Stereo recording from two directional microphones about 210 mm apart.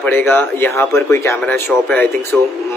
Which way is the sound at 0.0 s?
10° left (ahead or behind).